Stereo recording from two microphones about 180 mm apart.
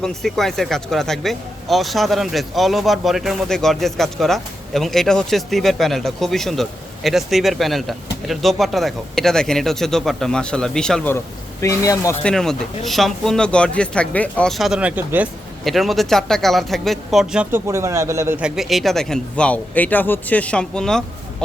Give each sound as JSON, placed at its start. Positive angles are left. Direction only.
{"t": 0.0, "sound": "speech", "side_deg": 0}
{"t": 11.6, "sound": "speech", "side_deg": 15}
{"t": 12.2, "sound": "speech", "side_deg": 5}